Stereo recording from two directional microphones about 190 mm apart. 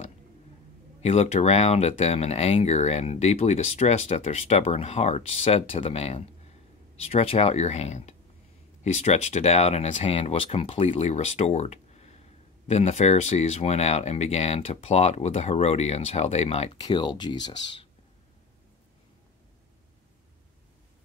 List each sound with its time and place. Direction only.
1.0 s speech: 35° left (ahead or behind)